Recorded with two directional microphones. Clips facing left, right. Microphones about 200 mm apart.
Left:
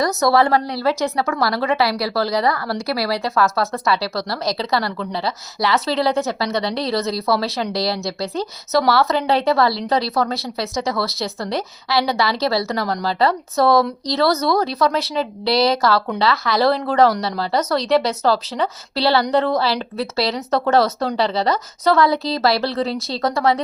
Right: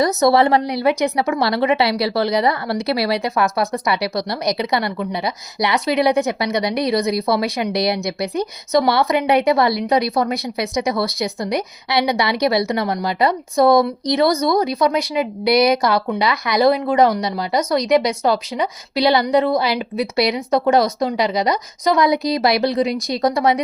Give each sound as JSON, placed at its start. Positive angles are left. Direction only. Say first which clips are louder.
{"t": 0.0, "sound": "speech", "louder": "right 2 dB", "side_deg": -20}